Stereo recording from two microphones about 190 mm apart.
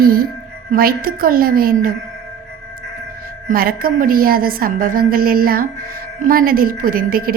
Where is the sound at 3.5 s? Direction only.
50° right (ahead or behind).